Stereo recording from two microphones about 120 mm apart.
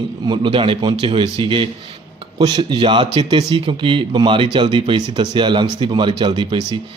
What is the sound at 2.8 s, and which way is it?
A man's voice, 45° right (ahead or behind).